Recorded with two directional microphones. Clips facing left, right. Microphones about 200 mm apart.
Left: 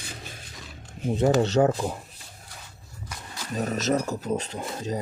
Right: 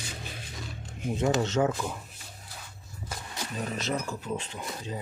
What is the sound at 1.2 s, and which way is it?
Speech, 35° left (ahead or behind).